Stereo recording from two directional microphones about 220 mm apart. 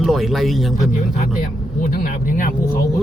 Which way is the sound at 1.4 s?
40° left (ahead or behind).